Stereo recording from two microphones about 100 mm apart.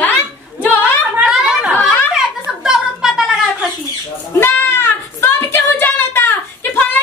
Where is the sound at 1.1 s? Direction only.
10° right (ahead or behind).